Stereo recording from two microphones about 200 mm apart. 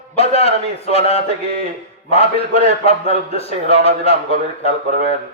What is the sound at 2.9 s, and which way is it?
A man's voice, 30° left (ahead or behind).